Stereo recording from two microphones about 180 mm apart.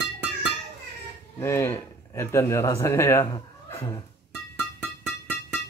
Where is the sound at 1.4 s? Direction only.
15° left (ahead or behind).